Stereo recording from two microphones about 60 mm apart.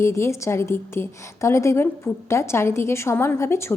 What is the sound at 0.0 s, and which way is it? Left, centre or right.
A woman's voice, left.